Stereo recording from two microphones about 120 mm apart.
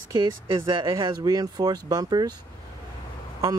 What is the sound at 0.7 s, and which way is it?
Speech, 40° right (ahead or behind).